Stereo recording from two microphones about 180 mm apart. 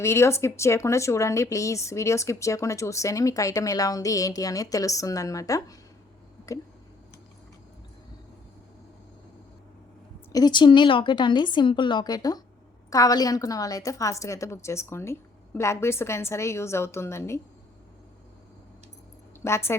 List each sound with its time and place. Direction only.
0.0 s speech: 15° left (ahead or behind)
10.3 s a woman's voice: 25° left (ahead or behind)
19.4 s a woman's voice: 15° left (ahead or behind)